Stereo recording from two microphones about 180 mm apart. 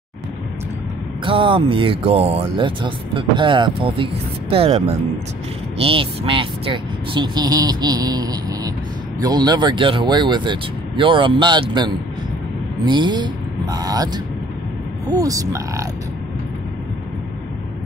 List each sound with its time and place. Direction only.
1.2 s speech: 30° right (ahead or behind)